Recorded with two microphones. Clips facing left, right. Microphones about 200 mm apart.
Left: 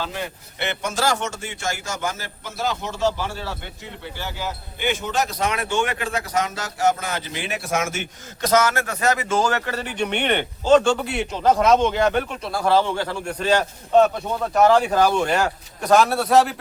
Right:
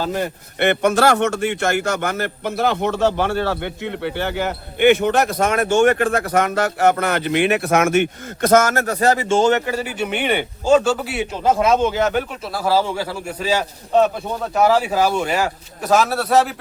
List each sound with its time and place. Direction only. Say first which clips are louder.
0.0 s a man's voice: right 7 dB; 45° right (ahead or behind); by 16.6 s centre (ahead or behind)